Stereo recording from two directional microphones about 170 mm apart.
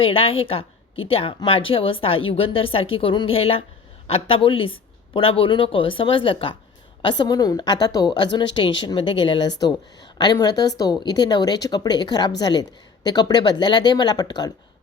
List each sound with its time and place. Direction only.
0.0 s a woman's voice: 35° left (ahead or behind)